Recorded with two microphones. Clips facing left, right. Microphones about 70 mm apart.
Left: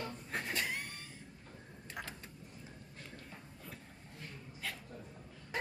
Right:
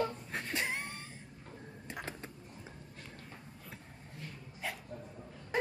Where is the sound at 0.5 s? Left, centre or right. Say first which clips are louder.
Right 4 dB; right.